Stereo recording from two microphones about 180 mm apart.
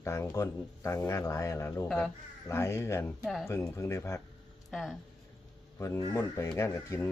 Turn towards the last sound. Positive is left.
turn(degrees=15)  # may be behind; listen again after turning